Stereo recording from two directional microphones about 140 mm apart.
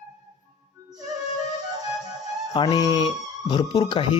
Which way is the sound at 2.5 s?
30° left (ahead or behind).